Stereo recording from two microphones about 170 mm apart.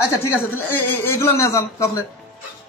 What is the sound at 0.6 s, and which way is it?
Speech, 10° left (ahead or behind).